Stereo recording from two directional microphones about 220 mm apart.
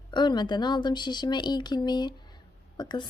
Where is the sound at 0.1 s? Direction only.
20° left (ahead or behind).